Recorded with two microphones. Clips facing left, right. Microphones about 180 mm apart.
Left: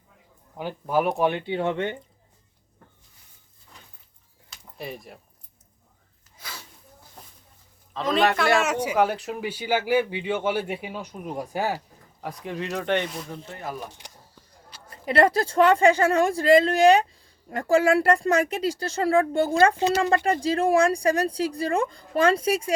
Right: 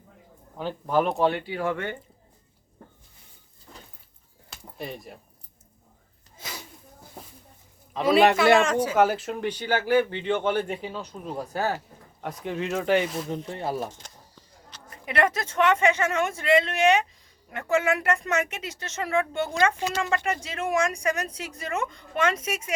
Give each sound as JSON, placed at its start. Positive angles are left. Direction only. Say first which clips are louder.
{"t": 0.5, "sound": "speech", "louder": "even", "side_deg": 10}
{"t": 4.8, "sound": "speech", "louder": "even", "side_deg": 0}
{"t": 6.4, "sound": "a sound", "louder": "right 3 dB", "side_deg": -20}
{"t": 7.9, "sound": "speech", "louder": "right 3 dB", "side_deg": -10}
{"t": 8.5, "sound": "speech", "louder": "right 2 dB", "side_deg": 10}
{"t": 9.0, "sound": "speech", "louder": "right 1 dB", "side_deg": 0}
{"t": 12.2, "sound": "speech", "louder": "right 1 dB", "side_deg": 0}
{"t": 13.5, "sound": "speech", "louder": "right 3 dB", "side_deg": -30}
{"t": 13.9, "sound": "a sound", "louder": "even", "side_deg": 10}
{"t": 14.8, "sound": "speech", "louder": "left 5 dB", "side_deg": 35}